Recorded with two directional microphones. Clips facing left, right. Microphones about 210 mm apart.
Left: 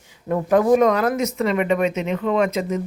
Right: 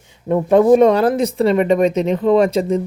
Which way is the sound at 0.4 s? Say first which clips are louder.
Right 5 dB; 25° right (ahead or behind).